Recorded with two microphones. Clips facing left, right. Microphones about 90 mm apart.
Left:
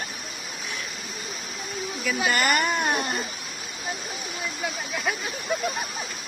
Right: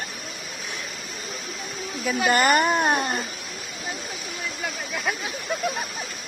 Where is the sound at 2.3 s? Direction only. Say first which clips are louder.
Right 5 dB; 30° right (ahead or behind).